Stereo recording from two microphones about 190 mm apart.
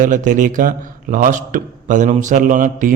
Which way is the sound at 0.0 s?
40° right (ahead or behind).